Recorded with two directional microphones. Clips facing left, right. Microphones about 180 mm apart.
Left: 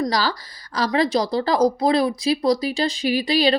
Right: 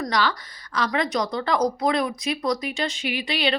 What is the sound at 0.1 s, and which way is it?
Speech, 35° left (ahead or behind).